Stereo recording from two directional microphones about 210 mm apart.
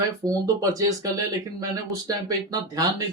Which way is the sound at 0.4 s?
15° right (ahead or behind).